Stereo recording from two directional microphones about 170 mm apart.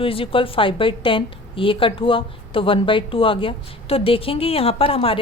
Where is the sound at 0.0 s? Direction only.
35° left (ahead or behind).